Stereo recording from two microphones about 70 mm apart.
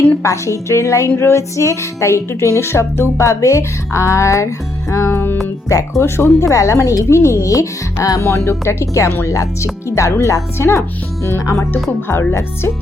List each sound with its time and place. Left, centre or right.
0.2 s music: left
5.1 s music: left
6.0 s music: left
11.7 s speech: left